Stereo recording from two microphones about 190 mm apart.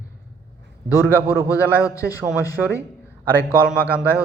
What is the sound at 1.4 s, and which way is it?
Speech, 15° left (ahead or behind).